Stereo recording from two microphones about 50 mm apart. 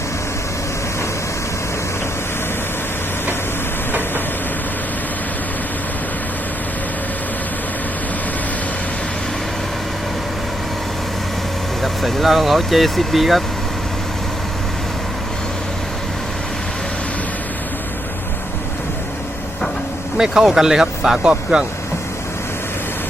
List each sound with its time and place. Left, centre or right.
11.8 s speech: centre
20.1 s speech: centre